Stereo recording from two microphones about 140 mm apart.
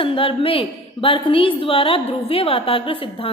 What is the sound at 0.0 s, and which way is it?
A woman's voice, 40° left (ahead or behind).